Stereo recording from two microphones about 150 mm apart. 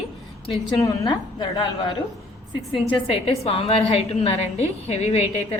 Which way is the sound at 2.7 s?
35° left (ahead or behind).